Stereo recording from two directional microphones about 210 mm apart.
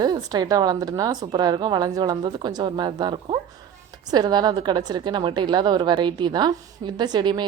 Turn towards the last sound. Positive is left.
turn(degrees=-20)  # may be behind; listen again after turning